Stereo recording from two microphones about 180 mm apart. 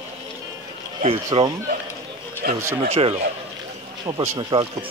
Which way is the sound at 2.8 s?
35° right (ahead or behind).